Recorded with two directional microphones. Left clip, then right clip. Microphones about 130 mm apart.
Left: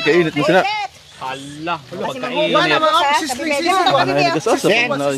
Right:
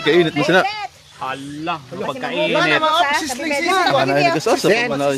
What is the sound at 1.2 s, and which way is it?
Speech, 25° right (ahead or behind).